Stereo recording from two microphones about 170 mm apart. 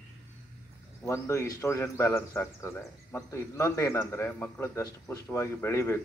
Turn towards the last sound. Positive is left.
turn(degrees=15)  # may be behind; listen again after turning